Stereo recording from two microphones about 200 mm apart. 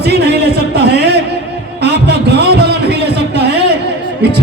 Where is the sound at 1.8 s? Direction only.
55° right (ahead or behind).